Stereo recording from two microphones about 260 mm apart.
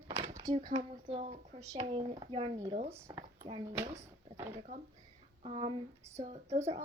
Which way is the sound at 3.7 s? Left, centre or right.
Centre.